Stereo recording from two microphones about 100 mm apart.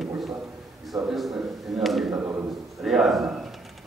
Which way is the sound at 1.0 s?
Centre (ahead or behind).